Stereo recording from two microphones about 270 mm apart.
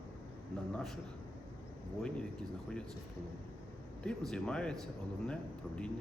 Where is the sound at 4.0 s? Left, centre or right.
Centre.